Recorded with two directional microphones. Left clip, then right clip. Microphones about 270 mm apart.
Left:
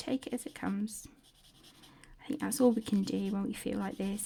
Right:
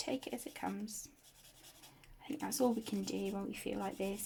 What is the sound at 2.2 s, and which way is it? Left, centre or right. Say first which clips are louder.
Speech: left 6 dB; left.